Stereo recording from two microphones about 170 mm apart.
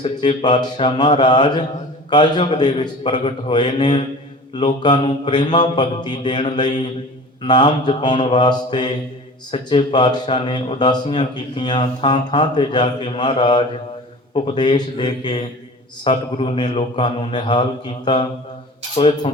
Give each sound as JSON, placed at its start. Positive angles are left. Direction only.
{"t": 0.0, "sound": "speech", "side_deg": 25}